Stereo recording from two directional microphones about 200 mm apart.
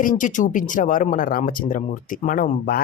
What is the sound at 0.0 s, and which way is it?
Speech, 40° left (ahead or behind).